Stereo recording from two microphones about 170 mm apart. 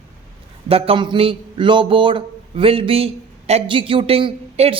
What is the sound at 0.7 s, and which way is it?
A man's voice, 30° right (ahead or behind).